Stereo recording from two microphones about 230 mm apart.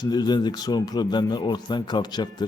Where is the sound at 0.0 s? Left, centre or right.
Centre.